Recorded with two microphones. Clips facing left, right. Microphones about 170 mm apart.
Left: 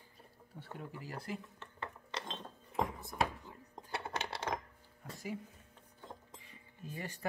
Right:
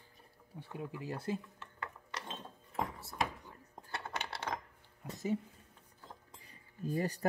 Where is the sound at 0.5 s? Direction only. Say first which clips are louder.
Right 2 dB; 15° right (ahead or behind).